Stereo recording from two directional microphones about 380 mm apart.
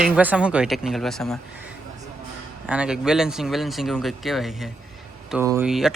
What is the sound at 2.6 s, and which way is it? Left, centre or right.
Speech, centre.